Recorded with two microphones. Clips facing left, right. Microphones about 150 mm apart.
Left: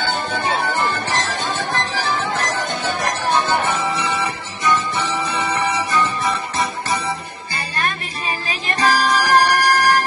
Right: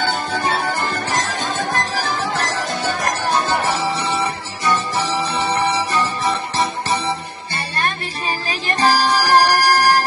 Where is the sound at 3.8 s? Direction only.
30° right (ahead or behind).